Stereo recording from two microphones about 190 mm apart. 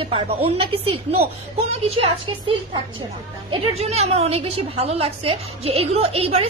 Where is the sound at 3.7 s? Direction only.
35° right (ahead or behind).